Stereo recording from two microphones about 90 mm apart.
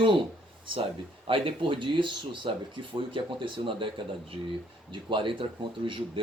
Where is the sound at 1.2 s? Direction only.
80° right.